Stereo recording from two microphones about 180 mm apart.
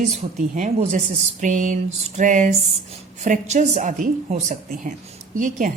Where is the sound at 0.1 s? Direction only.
40° right (ahead or behind).